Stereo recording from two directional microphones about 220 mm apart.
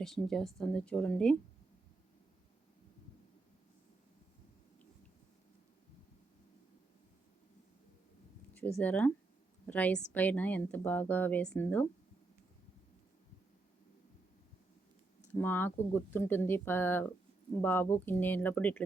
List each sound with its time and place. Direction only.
0.0 s a woman's voice: centre (ahead or behind)
8.8 s speech: 5° left (ahead or behind)
15.3 s speech: 10° left (ahead or behind)